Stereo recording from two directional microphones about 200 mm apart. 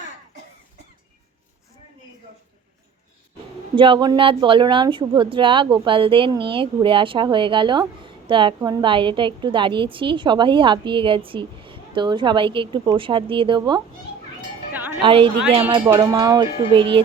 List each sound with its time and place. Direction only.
3.8 s speech: 25° right (ahead or behind)
14.7 s cowbell: 10° right (ahead or behind)
15.0 s speech: 25° right (ahead or behind)
15.8 s speech: 15° right (ahead or behind)